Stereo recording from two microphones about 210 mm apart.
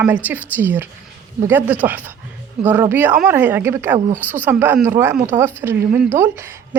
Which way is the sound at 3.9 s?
30° right (ahead or behind).